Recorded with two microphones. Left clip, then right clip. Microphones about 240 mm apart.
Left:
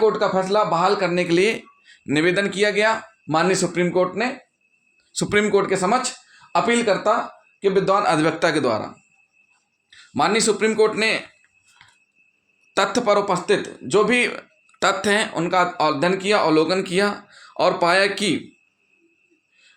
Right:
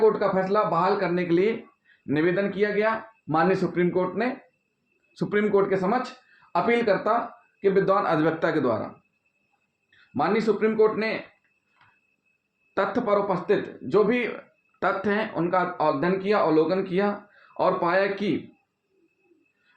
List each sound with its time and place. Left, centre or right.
0.0 s speech: left
10.2 s speech: left
12.7 s speech: left